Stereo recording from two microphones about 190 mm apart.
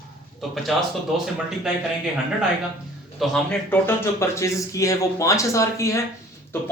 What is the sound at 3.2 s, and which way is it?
A man's voice, 5° left (ahead or behind).